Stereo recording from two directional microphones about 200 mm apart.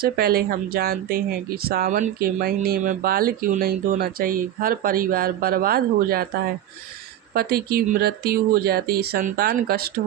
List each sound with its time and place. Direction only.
0.0 s speech: 50° right (ahead or behind)
7.3 s speech: 50° right (ahead or behind)